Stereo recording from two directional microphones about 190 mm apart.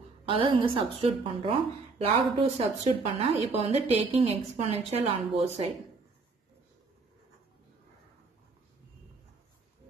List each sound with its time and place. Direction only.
0.2 s a woman's voice: 30° right (ahead or behind)